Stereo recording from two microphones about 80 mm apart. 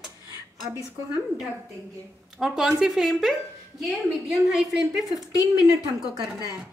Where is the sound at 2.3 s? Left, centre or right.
Centre.